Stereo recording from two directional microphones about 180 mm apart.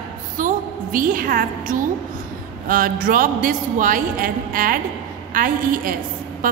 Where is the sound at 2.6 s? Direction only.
50° right (ahead or behind).